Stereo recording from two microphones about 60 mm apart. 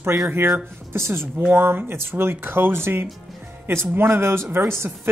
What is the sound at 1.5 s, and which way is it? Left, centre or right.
Speech, right.